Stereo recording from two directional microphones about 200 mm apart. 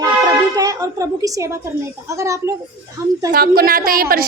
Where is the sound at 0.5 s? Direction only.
15° right (ahead or behind).